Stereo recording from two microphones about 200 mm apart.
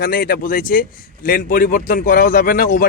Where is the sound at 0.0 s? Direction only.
50° left (ahead or behind).